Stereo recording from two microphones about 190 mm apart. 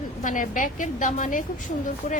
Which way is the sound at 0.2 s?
45° left (ahead or behind).